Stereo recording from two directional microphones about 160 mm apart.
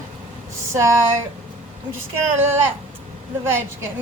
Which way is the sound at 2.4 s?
15° right (ahead or behind).